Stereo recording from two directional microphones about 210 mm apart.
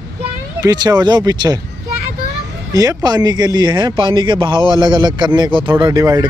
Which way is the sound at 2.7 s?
15° right (ahead or behind).